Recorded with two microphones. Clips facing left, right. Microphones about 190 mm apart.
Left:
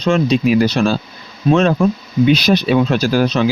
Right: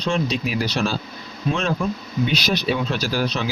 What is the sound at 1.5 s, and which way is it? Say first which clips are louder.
Speech: left 10 dB; 75° left (ahead or behind).